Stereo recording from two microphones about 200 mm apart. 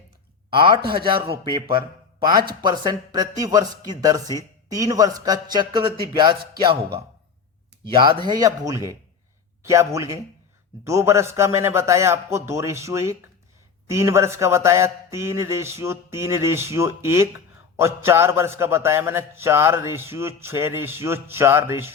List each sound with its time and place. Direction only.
0.5 s speech: 25° right (ahead or behind)
2.4 s speech: 45° right (ahead or behind)
2.6 s a man's voice: 20° right (ahead or behind)
8.3 s a man's voice: 15° right (ahead or behind)